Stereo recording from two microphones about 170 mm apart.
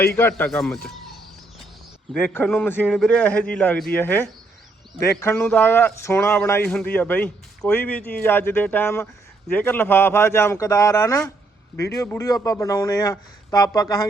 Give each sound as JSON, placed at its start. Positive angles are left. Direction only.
{"t": 0.2, "sound": "speech", "side_deg": 10}
{"t": 0.6, "sound": "speech", "side_deg": 0}
{"t": 2.1, "sound": "speech", "side_deg": 10}